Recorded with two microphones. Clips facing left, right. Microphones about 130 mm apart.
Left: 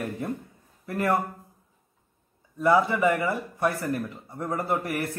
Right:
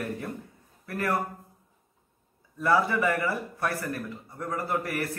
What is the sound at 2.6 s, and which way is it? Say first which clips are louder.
Speech: left 3 dB; 15° left (ahead or behind).